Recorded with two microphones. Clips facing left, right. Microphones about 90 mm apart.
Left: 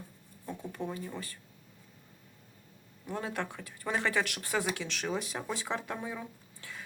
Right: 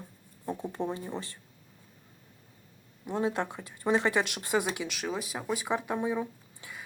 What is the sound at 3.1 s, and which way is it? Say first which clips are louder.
Speech: right 6 dB; 20° right (ahead or behind).